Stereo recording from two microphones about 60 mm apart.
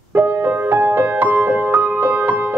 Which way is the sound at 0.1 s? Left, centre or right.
Right.